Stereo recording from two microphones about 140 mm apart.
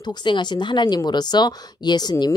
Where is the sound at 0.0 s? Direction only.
30° left (ahead or behind).